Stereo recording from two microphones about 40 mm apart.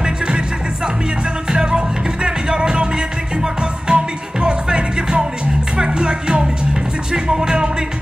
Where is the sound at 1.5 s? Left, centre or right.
Right.